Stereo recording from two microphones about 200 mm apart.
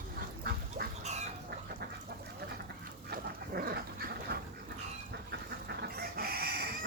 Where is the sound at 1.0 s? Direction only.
35° right (ahead or behind).